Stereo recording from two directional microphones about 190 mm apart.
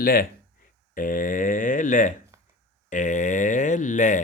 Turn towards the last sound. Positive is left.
turn(degrees=40)  # may be behind; listen again after turning